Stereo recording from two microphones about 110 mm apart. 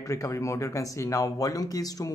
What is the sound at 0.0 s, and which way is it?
Speech, 30° left (ahead or behind).